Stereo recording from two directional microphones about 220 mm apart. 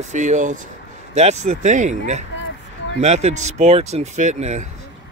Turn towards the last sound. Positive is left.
turn(degrees=-35)  # may be behind; listen again after turning